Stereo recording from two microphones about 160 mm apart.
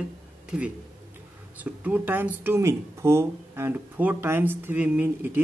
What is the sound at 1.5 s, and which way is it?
Speech, 10° right (ahead or behind).